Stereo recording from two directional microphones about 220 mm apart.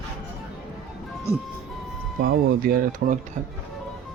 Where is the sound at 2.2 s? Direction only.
45° right (ahead or behind).